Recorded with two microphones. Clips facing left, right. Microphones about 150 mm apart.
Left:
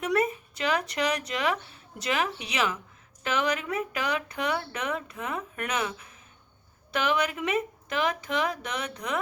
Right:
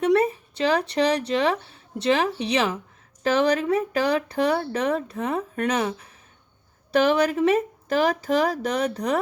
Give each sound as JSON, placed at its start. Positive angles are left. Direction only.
{"t": 0.0, "sound": "speech", "side_deg": -30}